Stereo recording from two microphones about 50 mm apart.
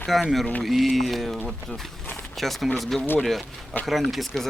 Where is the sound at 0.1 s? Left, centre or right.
Centre.